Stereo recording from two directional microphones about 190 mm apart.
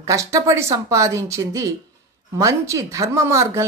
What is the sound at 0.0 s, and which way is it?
Speech, 15° right (ahead or behind).